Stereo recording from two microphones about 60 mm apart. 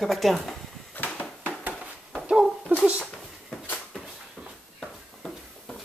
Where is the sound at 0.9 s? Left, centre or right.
Left.